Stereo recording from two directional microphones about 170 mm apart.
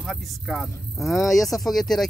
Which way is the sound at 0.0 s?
Centre (ahead or behind).